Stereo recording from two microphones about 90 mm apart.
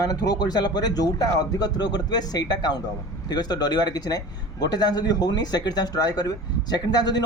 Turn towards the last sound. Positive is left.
turn(degrees=50)  # may be behind; listen again after turning